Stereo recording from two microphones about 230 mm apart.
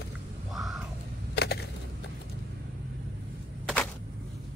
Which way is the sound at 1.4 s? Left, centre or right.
Left.